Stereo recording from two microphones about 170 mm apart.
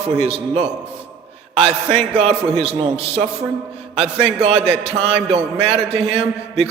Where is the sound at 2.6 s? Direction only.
35° right (ahead or behind).